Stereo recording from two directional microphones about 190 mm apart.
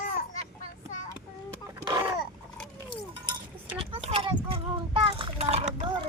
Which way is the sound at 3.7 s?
30° right (ahead or behind).